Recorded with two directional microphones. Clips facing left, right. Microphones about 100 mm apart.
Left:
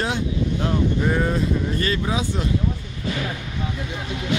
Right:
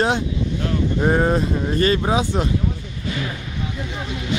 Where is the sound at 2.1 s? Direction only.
55° right (ahead or behind).